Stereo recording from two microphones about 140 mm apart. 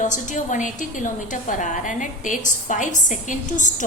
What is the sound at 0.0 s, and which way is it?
A woman's voice, 65° left (ahead or behind).